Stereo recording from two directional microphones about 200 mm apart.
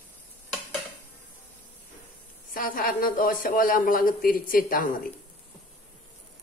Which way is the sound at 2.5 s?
45° left (ahead or behind).